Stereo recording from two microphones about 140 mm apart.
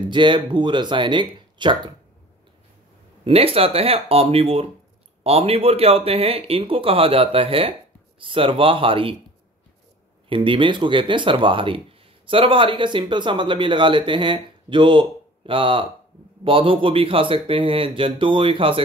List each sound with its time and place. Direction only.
0.0 s a man's voice: 35° right (ahead or behind)
3.3 s a man's voice: 45° right (ahead or behind)
10.3 s a man's voice: 35° right (ahead or behind)